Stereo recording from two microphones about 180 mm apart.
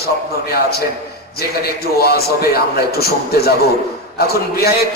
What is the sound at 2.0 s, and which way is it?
A man's voice, 60° left (ahead or behind).